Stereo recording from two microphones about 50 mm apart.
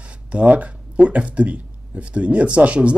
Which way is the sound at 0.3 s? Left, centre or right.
Right.